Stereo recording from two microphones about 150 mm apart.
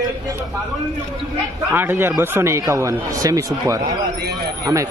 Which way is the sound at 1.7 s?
15° right (ahead or behind).